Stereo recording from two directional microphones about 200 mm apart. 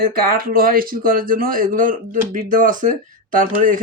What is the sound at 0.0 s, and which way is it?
Speech, 45° right (ahead or behind).